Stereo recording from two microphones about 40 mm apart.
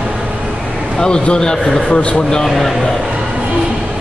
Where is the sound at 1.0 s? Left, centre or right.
Left.